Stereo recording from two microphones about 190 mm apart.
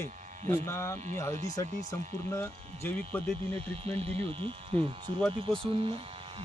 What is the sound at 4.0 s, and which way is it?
Speech, 30° right (ahead or behind).